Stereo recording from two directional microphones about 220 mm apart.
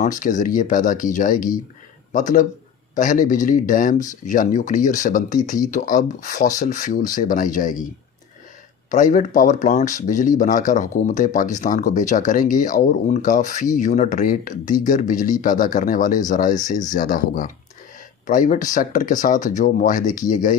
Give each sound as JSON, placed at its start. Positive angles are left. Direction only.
{"t": 0.0, "sound": "speech", "side_deg": 35}
{"t": 8.9, "sound": "speech", "side_deg": 35}